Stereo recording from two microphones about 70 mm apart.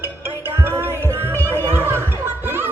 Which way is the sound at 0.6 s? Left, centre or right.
Right.